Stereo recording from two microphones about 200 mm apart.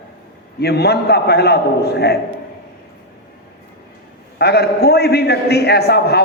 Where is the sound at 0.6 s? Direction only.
55° left (ahead or behind).